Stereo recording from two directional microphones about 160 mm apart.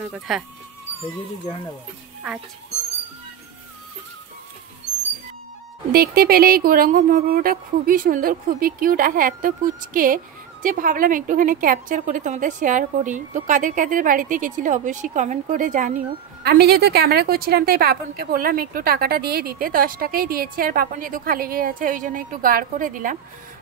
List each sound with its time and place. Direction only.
0.0 s speech: 5° right (ahead or behind)
5.9 s a woman's voice: 75° right (ahead or behind); by 16.0 s 55° right (ahead or behind)
16.4 s a woman's voice: 80° right; by 23.1 s 55° right (ahead or behind)